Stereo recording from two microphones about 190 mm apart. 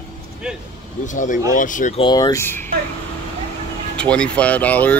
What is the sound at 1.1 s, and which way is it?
Speech, 45° left (ahead or behind).